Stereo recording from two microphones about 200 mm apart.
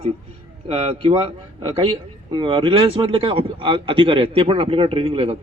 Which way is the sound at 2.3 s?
25° right (ahead or behind).